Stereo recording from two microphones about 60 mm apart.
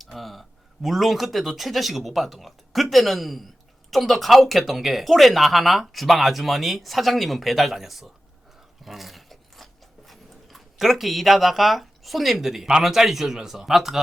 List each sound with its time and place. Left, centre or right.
0.0 s a man's voice: centre
8.8 s a sound: centre
10.1 s speech: centre